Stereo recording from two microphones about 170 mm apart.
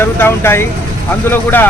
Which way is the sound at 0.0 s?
15° left (ahead or behind).